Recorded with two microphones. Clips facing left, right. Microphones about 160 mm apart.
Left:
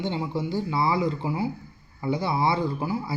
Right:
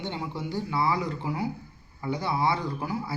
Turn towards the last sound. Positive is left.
turn(degrees=10)  # may be behind; listen again after turning